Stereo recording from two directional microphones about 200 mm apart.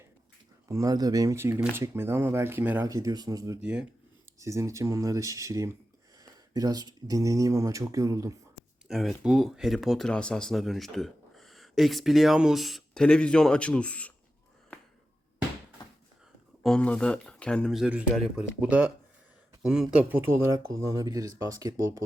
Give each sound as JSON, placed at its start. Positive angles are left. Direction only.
{"t": 0.7, "sound": "speech", "side_deg": -15}
{"t": 3.6, "sound": "speech", "side_deg": -5}
{"t": 8.9, "sound": "speech", "side_deg": 0}
{"t": 16.6, "sound": "speech", "side_deg": 5}